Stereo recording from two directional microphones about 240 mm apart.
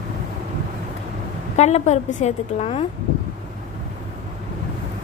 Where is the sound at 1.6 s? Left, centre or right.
Left.